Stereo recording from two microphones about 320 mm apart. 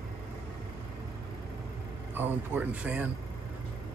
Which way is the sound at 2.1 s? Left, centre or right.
Centre.